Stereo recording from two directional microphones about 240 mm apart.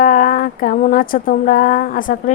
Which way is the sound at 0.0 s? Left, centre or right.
Left.